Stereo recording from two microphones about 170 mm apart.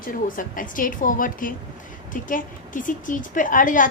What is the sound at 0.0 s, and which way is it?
A woman's voice, 55° left (ahead or behind).